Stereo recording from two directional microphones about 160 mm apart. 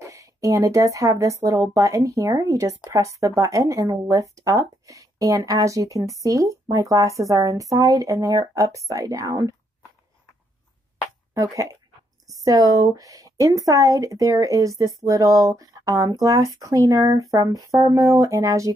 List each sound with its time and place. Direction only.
0.0 s speech: 20° right (ahead or behind)
11.3 s speech: 20° right (ahead or behind)